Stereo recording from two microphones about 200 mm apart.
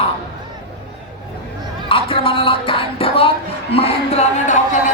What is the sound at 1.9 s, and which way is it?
Speech, 25° left (ahead or behind).